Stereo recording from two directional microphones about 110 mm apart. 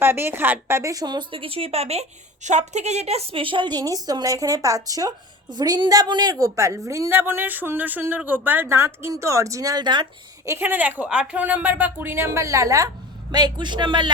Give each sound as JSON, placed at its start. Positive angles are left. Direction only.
{"t": 0.0, "sound": "speech", "side_deg": -20}
{"t": 0.8, "sound": "a woman's voice", "side_deg": -30}
{"t": 1.4, "sound": "a woman's voice", "side_deg": -60}
{"t": 7.1, "sound": "speech", "side_deg": -20}
{"t": 10.6, "sound": "speech", "side_deg": -15}
{"t": 13.3, "sound": "speech", "side_deg": -40}